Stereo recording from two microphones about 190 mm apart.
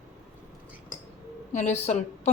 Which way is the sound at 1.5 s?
35° left (ahead or behind).